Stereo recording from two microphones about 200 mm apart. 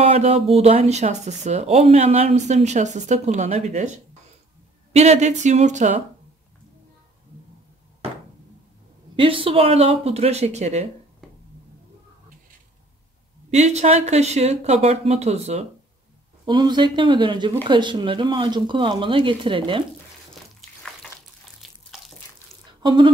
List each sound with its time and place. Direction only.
0.0 s speech: 30° right (ahead or behind)
9.1 s speech: 25° right (ahead or behind)
13.5 s speech: 35° right (ahead or behind)
16.4 s speech: 20° right (ahead or behind)
21.6 s bathtub: centre (ahead or behind)
22.8 s speech: 20° right (ahead or behind)